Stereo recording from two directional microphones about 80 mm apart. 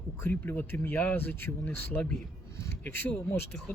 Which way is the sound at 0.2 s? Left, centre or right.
Left.